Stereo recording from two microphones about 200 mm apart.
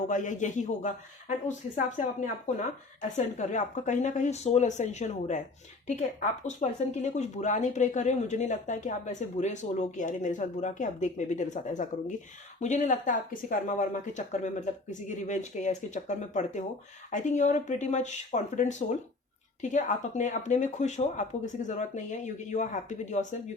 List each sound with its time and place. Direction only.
0.1 s speech: 40° left (ahead or behind)